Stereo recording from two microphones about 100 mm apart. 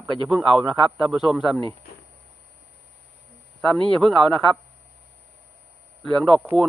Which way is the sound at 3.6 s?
5° left (ahead or behind).